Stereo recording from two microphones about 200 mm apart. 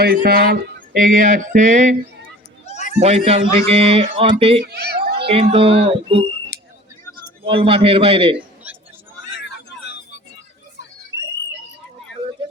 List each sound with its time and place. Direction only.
0.0 s music: 50° right (ahead or behind)
2.6 s a sound: 35° left (ahead or behind)
3.0 s a man's voice: 35° right (ahead or behind)
4.6 s a child's voice: 55° right (ahead or behind)
5.1 s speech: 30° right (ahead or behind)
7.4 s speech: 30° right (ahead or behind)
8.7 s a sound: 10° right (ahead or behind)